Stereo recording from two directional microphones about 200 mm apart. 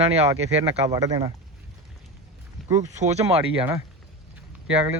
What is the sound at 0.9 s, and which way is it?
Speech, 20° right (ahead or behind).